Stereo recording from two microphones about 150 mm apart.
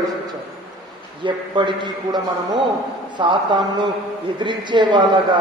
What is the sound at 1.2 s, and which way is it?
A man's voice, 30° right (ahead or behind).